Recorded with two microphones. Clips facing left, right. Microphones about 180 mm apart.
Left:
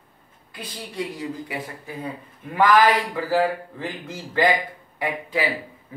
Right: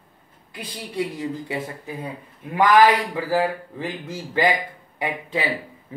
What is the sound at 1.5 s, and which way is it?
Speech, 25° right (ahead or behind).